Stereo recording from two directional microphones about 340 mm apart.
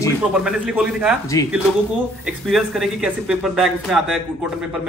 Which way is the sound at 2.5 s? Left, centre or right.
Centre.